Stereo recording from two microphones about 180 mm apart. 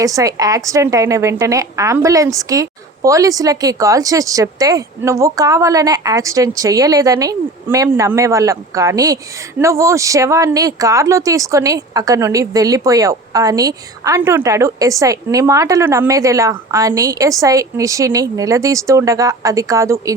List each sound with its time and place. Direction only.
0.0 s speech: 20° right (ahead or behind)